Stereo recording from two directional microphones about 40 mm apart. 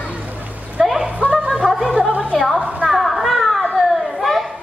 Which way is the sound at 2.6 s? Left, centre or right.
Right.